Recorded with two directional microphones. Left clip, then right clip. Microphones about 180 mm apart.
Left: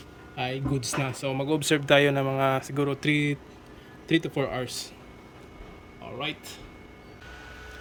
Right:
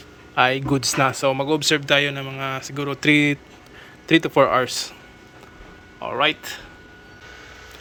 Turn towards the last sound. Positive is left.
turn(degrees=5)  # may be behind; listen again after turning